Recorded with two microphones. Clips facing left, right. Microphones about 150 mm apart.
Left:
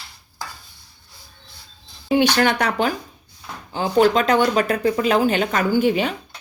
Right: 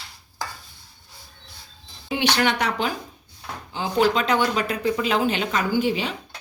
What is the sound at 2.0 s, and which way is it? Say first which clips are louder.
Speech: left 5 dB; 45° left (ahead or behind).